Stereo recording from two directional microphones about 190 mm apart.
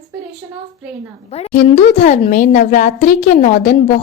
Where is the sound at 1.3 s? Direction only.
35° left (ahead or behind).